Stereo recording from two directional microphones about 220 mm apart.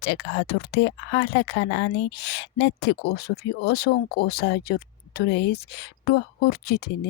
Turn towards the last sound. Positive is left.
turn(degrees=50)  # may be behind; listen again after turning